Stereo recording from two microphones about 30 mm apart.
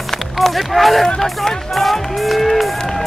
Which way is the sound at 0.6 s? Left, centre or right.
Centre.